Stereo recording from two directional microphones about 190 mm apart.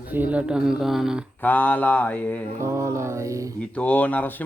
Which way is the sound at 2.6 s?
15° right (ahead or behind).